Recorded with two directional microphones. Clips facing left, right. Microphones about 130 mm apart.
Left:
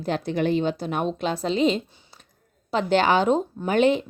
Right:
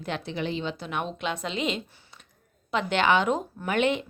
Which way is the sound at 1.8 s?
20° left (ahead or behind).